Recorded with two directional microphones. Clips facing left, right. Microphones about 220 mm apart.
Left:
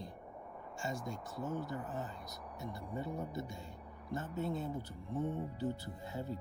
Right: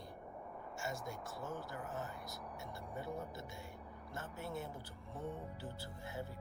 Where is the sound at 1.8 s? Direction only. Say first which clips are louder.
Left 2 dB; 15° left (ahead or behind).